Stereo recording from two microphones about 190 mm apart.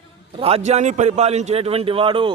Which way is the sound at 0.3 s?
30° right (ahead or behind).